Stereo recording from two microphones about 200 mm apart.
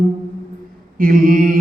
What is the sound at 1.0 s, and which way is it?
Mantra, 45° right (ahead or behind).